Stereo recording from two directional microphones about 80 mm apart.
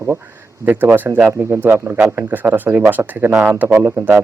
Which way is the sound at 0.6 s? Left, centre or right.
Right.